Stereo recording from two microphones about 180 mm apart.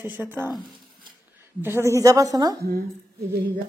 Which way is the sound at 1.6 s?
15° right (ahead or behind).